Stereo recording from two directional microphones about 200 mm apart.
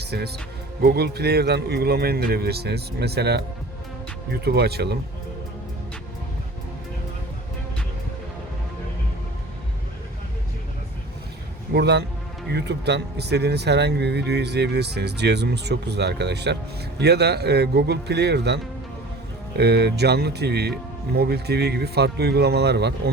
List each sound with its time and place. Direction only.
0.0 s a man's voice: 55° right (ahead or behind)
11.7 s a man's voice: 55° right (ahead or behind)